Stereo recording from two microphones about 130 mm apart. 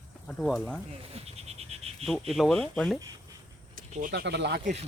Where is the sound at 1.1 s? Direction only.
55° right (ahead or behind).